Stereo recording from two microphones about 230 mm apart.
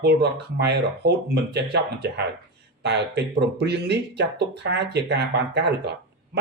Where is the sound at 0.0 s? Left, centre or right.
Right.